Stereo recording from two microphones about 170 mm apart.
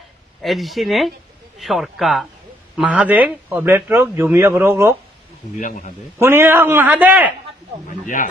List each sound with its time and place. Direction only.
0.4 s a man's voice: centre (ahead or behind)
5.6 s a man's voice: 50° left (ahead or behind)
6.1 s a man's voice: 15° right (ahead or behind)